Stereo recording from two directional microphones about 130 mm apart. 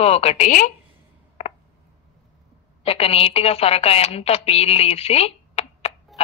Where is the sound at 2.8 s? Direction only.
50° left (ahead or behind).